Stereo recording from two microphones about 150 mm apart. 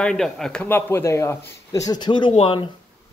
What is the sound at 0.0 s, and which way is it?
A man's voice, 5° left (ahead or behind).